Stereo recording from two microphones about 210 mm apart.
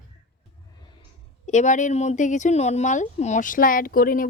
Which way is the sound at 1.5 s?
35° left (ahead or behind).